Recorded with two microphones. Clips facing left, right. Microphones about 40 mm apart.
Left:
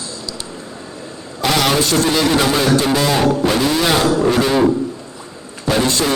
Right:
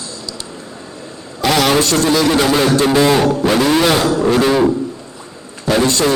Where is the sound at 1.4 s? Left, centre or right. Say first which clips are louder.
Right 2 dB; centre.